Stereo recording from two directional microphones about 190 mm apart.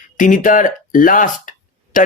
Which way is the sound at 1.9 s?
45° left (ahead or behind).